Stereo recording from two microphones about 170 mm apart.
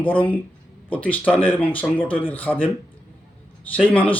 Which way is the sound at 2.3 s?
10° left (ahead or behind).